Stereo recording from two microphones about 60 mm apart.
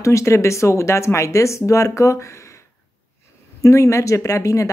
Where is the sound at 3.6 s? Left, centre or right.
Left.